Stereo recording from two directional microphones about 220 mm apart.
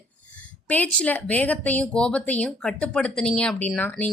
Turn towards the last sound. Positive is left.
turn(degrees=5)  # may be behind; listen again after turning